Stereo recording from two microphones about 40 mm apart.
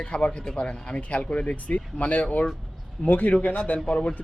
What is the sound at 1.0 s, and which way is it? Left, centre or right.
Speech, left.